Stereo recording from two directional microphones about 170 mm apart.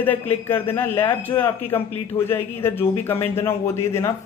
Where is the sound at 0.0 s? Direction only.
10° left (ahead or behind).